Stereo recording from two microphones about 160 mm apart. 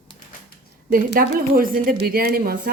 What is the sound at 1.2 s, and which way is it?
Speech, 65° right (ahead or behind).